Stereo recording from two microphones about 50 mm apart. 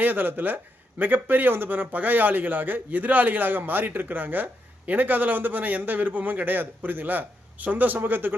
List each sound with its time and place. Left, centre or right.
0.0 s speech: right